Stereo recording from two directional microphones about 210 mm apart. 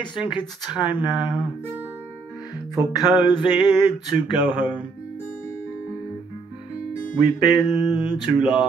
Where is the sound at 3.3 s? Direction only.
20° left (ahead or behind).